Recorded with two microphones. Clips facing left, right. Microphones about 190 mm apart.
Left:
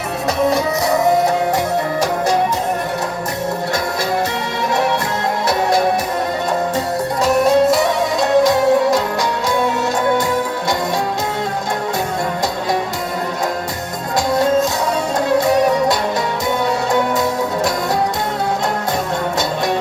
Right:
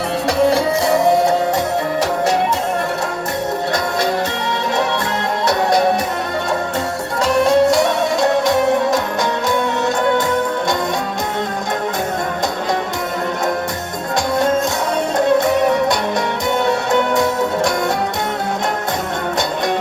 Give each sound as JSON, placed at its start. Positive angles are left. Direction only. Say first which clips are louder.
{"t": 0.5, "sound": "music", "louder": "right 1 dB", "side_deg": -25}
{"t": 7.4, "sound": "music", "louder": "right 1 dB", "side_deg": -25}
{"t": 15.4, "sound": "music", "louder": "left 1 dB", "side_deg": -20}